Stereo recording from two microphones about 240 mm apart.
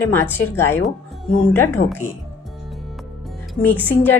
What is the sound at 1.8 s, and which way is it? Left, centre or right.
Speech, left.